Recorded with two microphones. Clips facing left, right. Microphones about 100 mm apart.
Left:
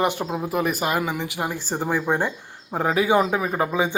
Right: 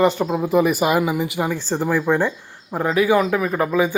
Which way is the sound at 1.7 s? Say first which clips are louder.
Right 4 dB; 25° left (ahead or behind).